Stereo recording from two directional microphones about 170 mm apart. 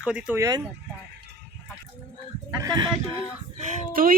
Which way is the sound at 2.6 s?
25° right (ahead or behind).